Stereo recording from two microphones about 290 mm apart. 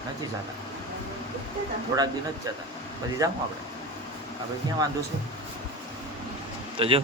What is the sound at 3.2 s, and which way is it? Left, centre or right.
Speech, centre.